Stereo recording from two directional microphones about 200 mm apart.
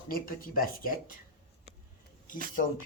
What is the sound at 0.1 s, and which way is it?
Speech, 45° left (ahead or behind).